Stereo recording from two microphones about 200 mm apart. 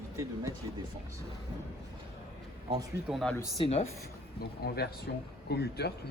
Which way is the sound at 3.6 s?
30° left (ahead or behind).